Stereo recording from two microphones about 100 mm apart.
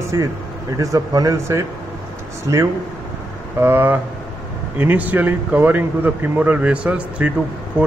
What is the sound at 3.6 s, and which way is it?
A man's voice, 20° right (ahead or behind).